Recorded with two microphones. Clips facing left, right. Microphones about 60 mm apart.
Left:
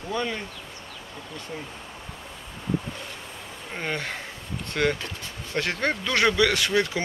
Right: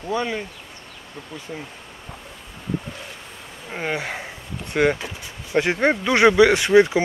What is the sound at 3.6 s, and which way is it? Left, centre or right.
Speech, centre.